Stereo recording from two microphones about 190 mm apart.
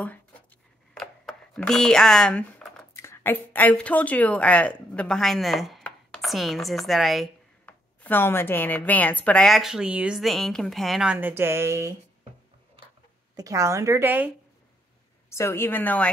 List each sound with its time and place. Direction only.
0.9 s a sound: centre (ahead or behind)
2.9 s speech: 15° left (ahead or behind)
7.6 s a woman's voice: 10° left (ahead or behind); by 11.9 s 15° right (ahead or behind)
13.4 s a woman's voice: 15° right (ahead or behind)
15.2 s a woman's voice: 15° left (ahead or behind)